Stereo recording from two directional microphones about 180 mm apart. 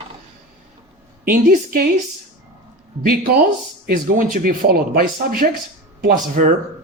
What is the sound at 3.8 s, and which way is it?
A woman's voice, 55° right (ahead or behind).